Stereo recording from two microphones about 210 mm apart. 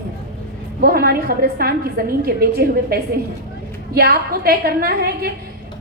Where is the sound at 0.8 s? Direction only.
45° right (ahead or behind).